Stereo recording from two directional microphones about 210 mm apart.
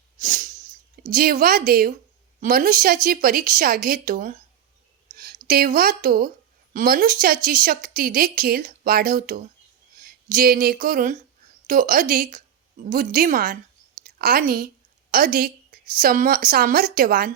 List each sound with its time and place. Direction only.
0.2 s sneeze: 40° right (ahead or behind)
1.1 s a woman's voice: 45° right (ahead or behind)